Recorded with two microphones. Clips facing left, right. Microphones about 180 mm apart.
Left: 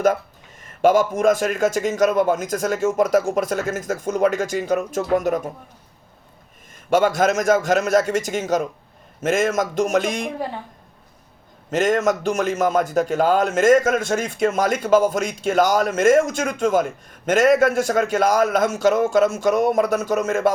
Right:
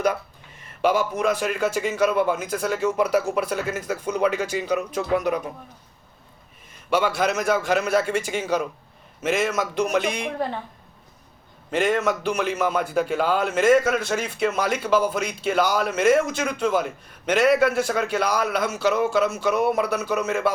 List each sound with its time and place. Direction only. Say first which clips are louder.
0.6 s a man's voice: left 5 dB; 45° left (ahead or behind)
6.9 s a man's voice: left 5 dB; 45° left (ahead or behind)
11.7 s a man's voice: left 3 dB; 45° left (ahead or behind)